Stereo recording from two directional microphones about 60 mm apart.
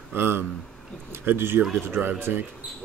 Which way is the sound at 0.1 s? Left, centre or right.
Right.